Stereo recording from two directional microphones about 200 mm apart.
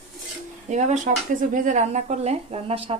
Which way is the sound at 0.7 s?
35° right (ahead or behind).